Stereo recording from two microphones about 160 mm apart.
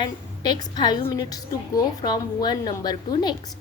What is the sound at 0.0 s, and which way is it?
A woman's voice, 30° left (ahead or behind).